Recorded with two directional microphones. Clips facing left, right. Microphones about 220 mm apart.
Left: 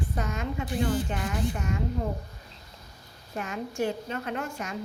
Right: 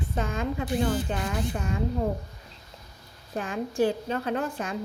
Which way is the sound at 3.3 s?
30° right (ahead or behind).